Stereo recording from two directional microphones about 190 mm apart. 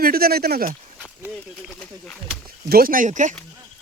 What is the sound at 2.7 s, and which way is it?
Speech, 50° right (ahead or behind).